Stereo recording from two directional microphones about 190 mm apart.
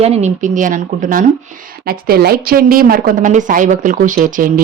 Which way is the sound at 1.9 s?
50° right (ahead or behind).